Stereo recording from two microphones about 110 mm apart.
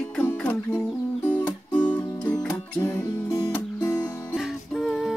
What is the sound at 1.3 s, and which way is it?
Music, 15° left (ahead or behind).